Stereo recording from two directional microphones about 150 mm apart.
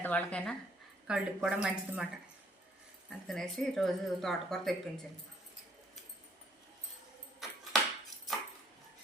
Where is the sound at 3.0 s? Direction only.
5° left (ahead or behind).